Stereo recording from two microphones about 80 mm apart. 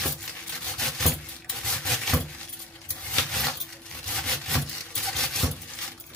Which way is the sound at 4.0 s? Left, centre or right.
Centre.